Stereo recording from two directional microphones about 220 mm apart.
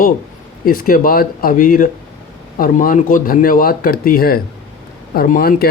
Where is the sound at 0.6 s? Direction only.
40° left (ahead or behind).